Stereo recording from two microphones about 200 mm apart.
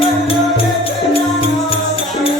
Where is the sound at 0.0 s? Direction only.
25° left (ahead or behind).